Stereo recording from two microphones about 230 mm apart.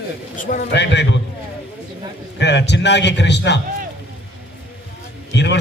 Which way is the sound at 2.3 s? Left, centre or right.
Left.